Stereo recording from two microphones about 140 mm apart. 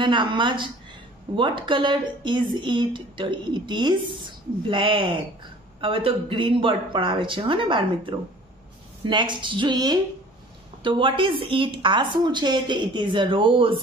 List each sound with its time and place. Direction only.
0.0 s speech: 35° right (ahead or behind)